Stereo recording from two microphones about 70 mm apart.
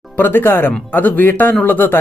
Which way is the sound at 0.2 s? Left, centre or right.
Left.